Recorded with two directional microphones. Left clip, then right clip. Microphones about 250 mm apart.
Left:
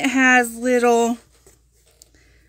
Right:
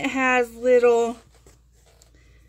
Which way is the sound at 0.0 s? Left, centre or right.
Left.